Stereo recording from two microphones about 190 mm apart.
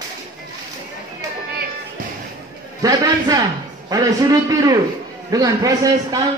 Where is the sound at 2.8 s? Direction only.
20° right (ahead or behind).